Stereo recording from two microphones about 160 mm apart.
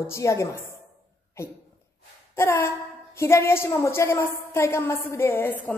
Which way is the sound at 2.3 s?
15° left (ahead or behind).